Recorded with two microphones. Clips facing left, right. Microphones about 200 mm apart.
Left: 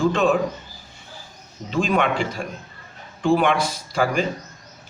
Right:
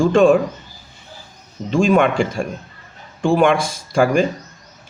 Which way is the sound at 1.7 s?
45° right (ahead or behind).